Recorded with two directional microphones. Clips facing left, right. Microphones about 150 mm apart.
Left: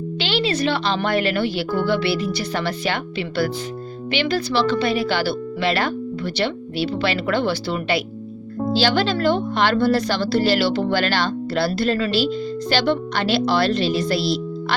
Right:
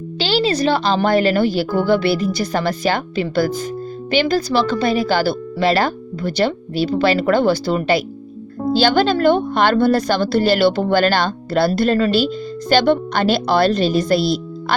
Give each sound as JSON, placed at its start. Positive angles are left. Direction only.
{"t": 0.2, "sound": "a woman's voice", "side_deg": -35}